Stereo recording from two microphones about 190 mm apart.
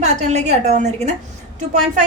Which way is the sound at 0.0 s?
40° right (ahead or behind).